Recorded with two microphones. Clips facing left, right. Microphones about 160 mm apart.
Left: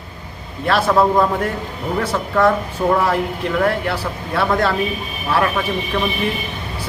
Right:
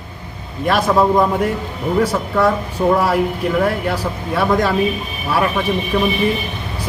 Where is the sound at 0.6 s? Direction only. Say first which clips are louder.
Right 1 dB; 15° right (ahead or behind).